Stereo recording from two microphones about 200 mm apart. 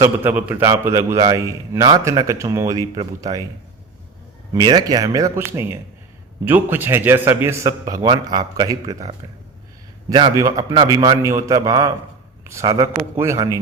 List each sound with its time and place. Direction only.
0.0 s a man's voice: 10° right (ahead or behind)
4.5 s a man's voice: 20° right (ahead or behind)
10.1 s a man's voice: 20° right (ahead or behind)